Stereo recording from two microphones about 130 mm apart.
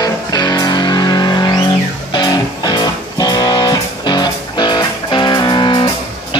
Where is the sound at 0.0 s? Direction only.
30° left (ahead or behind).